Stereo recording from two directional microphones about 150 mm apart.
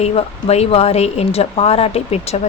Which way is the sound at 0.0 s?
45° left (ahead or behind).